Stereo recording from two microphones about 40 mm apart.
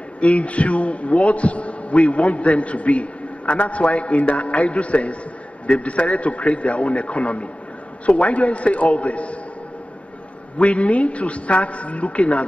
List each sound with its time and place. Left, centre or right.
0.2 s a man's voice: left
10.6 s a man's voice: left